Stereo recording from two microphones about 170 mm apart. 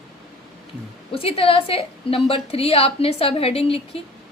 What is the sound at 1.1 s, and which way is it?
A woman's voice, 35° left (ahead or behind).